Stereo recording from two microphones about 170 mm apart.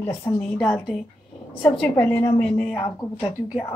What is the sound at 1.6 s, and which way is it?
Speech, 5° left (ahead or behind).